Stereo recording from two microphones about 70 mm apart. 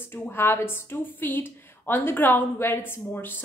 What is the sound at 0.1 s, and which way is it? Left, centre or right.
A woman's voice, left.